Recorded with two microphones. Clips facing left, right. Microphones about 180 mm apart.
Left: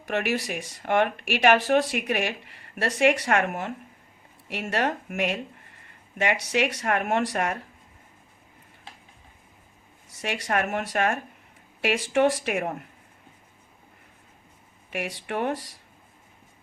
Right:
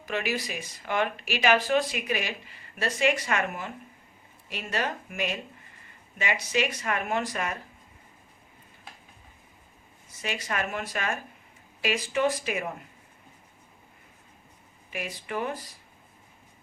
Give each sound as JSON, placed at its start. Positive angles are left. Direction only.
{"t": 0.0, "sound": "speech", "side_deg": 65}
{"t": 10.2, "sound": "speech", "side_deg": 70}
{"t": 14.8, "sound": "speech", "side_deg": 70}